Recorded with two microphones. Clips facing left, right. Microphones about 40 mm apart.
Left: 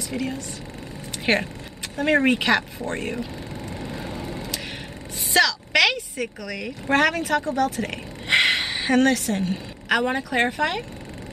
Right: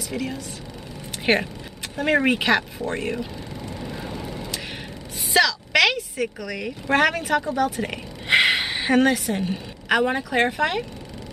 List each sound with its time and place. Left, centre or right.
0.1 s speech: centre
5.3 s a woman's voice: centre